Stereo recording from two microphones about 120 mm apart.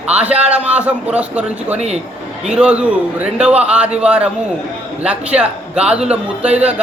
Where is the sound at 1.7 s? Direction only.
65° right (ahead or behind).